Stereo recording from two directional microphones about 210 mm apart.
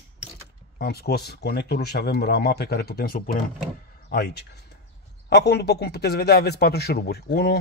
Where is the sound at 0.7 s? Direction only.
50° left (ahead or behind).